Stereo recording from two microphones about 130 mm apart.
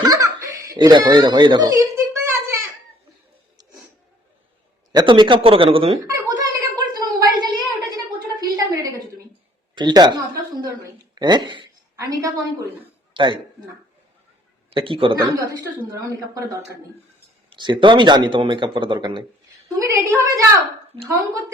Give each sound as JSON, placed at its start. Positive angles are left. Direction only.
{"t": 0.0, "sound": "giggle", "side_deg": -25}
{"t": 4.9, "sound": "speech", "side_deg": -35}
{"t": 6.1, "sound": "a sound", "side_deg": -30}
{"t": 9.7, "sound": "a woman's voice", "side_deg": -35}
{"t": 11.2, "sound": "a sound", "side_deg": -35}
{"t": 12.0, "sound": "a woman's voice", "side_deg": -25}
{"t": 13.1, "sound": "speech", "side_deg": -40}
{"t": 14.7, "sound": "speech", "side_deg": -45}
{"t": 15.2, "sound": "a woman's voice", "side_deg": -25}
{"t": 17.5, "sound": "speech", "side_deg": -40}
{"t": 19.6, "sound": "a woman's voice", "side_deg": -25}